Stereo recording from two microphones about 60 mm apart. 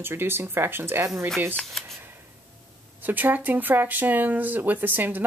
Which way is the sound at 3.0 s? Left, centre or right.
Right.